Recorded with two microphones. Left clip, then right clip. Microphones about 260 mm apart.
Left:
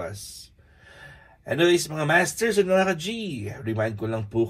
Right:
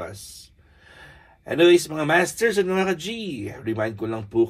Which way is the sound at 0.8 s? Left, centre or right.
Right.